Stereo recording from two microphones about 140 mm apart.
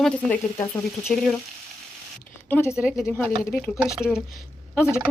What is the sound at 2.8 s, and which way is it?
A woman's voice, 5° right (ahead or behind).